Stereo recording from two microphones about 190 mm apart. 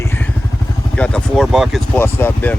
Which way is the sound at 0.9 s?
5° left (ahead or behind).